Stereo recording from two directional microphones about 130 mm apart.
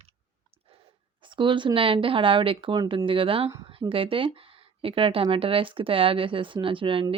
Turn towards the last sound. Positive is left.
turn(degrees=-45)  # may be behind; listen again after turning